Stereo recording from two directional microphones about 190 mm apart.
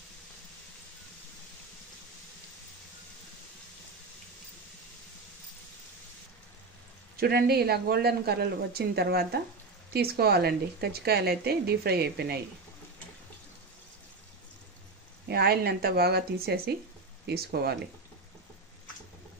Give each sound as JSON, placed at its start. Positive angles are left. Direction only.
{"t": 7.2, "sound": "a woman's voice", "side_deg": -55}
{"t": 15.2, "sound": "a woman's voice", "side_deg": -55}